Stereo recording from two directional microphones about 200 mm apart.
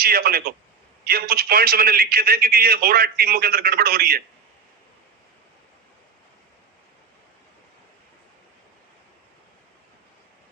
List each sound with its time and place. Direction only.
0.0 s a man's voice: 50° right (ahead or behind)